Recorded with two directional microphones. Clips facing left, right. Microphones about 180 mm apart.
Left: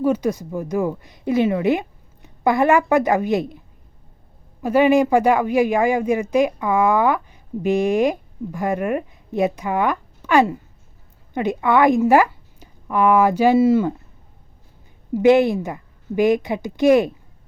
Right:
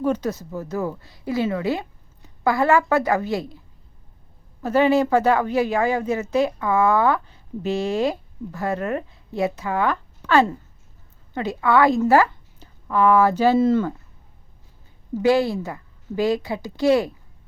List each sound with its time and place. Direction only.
0.0 s speech: 10° left (ahead or behind)
4.6 s a woman's voice: 15° left (ahead or behind)
15.1 s a woman's voice: 20° left (ahead or behind)